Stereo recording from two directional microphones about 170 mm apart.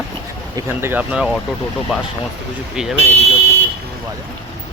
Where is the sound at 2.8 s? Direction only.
5° right (ahead or behind).